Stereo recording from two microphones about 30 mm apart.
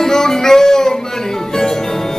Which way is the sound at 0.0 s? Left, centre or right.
Centre.